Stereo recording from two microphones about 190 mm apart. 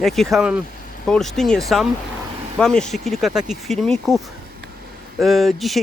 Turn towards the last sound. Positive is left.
turn(degrees=0)  # may be behind; listen again after turning